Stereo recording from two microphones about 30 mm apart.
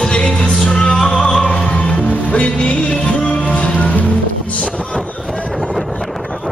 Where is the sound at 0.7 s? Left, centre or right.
Left.